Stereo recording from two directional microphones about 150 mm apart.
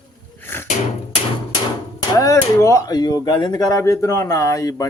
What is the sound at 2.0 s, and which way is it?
Speech, 20° left (ahead or behind).